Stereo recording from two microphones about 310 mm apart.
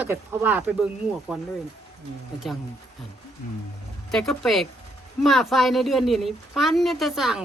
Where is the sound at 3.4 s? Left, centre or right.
Left.